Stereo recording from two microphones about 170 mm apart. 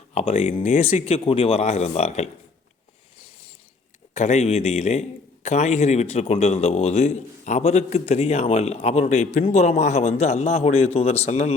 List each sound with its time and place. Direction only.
0.1 s a man's voice: 40° left (ahead or behind)
4.1 s a man's voice: 40° left (ahead or behind)